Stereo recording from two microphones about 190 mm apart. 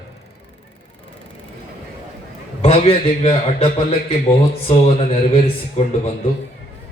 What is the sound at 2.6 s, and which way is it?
A man's voice, 30° left (ahead or behind).